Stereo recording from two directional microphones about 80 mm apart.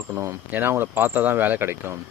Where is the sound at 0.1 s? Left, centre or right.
Right.